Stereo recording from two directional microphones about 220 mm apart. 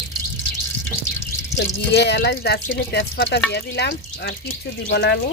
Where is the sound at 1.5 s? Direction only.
50° left (ahead or behind).